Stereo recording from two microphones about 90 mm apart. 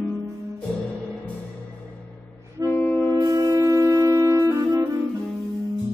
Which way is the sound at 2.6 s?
30° left (ahead or behind).